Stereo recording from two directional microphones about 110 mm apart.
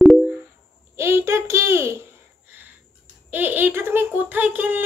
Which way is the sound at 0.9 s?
25° right (ahead or behind).